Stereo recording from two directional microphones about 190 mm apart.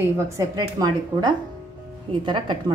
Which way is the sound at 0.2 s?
15° right (ahead or behind).